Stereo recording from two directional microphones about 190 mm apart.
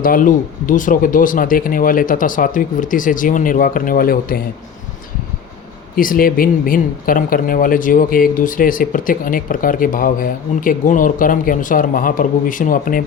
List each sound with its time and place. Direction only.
0.0 s a man's voice: 45° left (ahead or behind)
6.0 s a man's voice: 50° left (ahead or behind)